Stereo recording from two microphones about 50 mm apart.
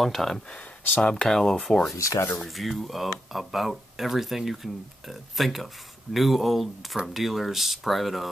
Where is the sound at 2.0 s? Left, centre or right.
Left.